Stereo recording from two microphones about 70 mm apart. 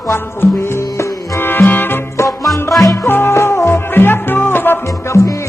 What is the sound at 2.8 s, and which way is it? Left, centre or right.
Music, left.